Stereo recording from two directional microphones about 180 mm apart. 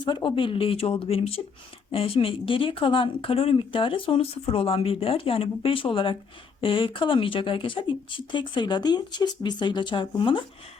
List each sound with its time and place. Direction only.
0.0 s speech: 25° left (ahead or behind)